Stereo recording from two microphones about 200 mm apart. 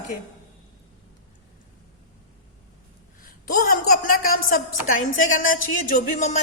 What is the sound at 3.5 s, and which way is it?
Speech, 45° left (ahead or behind).